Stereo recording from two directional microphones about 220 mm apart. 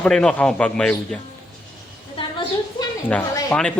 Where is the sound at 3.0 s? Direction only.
10° left (ahead or behind).